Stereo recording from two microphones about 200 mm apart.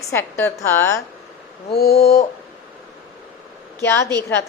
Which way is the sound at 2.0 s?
30° left (ahead or behind).